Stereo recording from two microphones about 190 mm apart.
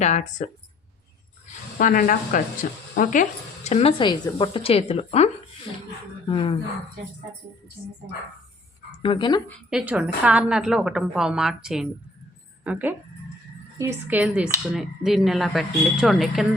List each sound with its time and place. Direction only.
0.0 s a woman's voice: 40° left (ahead or behind)
1.8 s a woman's voice: 45° left (ahead or behind); by 6.6 s 25° left (ahead or behind)
9.0 s speech: 25° left (ahead or behind)
9.6 s speech: 5° right (ahead or behind)